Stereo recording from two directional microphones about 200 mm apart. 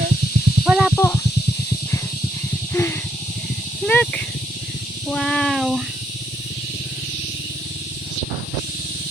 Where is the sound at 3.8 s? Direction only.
5° left (ahead or behind).